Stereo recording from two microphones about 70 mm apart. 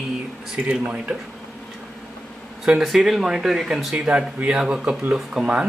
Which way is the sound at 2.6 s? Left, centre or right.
Centre.